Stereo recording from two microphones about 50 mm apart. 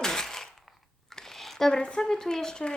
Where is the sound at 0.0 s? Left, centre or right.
Centre.